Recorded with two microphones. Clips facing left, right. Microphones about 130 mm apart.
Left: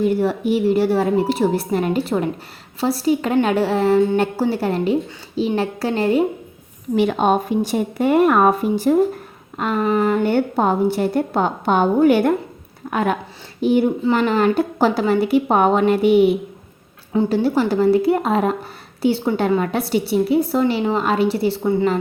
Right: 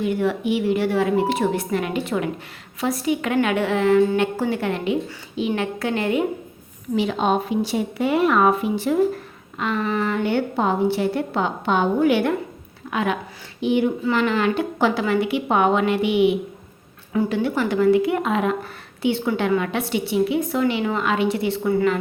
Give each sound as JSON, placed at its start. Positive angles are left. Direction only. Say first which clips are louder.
{"t": 0.0, "sound": "a woman's voice", "louder": "left 3 dB", "side_deg": 40}
{"t": 6.9, "sound": "a woman's voice", "louder": "left 4 dB", "side_deg": 55}